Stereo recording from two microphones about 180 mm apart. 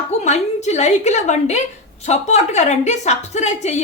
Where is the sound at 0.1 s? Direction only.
40° left (ahead or behind).